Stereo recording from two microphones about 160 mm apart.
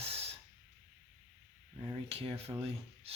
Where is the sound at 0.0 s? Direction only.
40° right (ahead or behind).